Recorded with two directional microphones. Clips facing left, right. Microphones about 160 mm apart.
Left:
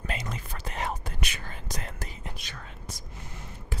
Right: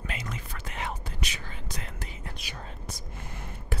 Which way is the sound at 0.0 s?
35° left (ahead or behind).